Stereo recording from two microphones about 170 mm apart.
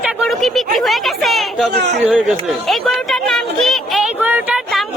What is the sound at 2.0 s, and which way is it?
Chatter, centre (ahead or behind).